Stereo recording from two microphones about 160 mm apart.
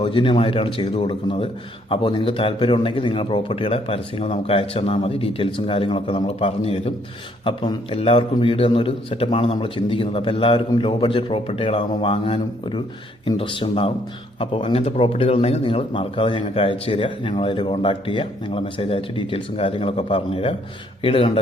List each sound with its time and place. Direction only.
0.0 s speech: 30° left (ahead or behind)